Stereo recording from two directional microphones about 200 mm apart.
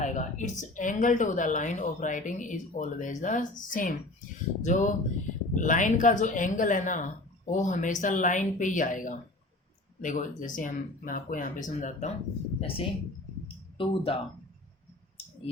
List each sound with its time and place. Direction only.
0.0 s speech: 40° left (ahead or behind)
15.2 s clicking: 30° left (ahead or behind)